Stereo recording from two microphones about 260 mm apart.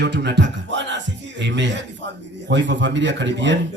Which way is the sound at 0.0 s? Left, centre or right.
Right.